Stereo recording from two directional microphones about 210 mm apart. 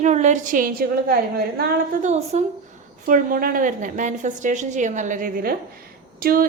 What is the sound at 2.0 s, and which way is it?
A woman's voice, 30° right (ahead or behind).